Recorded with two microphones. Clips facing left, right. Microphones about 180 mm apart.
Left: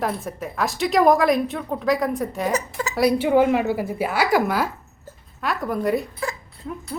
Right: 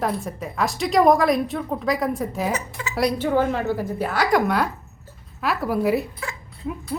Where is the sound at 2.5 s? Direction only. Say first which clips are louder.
Left 5 dB; 40° left (ahead or behind).